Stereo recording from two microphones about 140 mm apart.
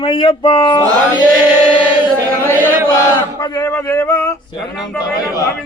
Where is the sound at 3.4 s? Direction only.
20° left (ahead or behind).